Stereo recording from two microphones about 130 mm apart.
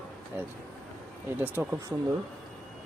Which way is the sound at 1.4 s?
15° right (ahead or behind).